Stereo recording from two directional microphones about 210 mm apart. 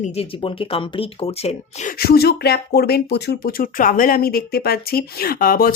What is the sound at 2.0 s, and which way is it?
Speech, 50° left (ahead or behind).